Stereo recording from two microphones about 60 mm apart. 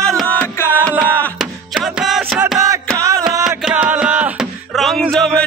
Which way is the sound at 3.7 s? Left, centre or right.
Right.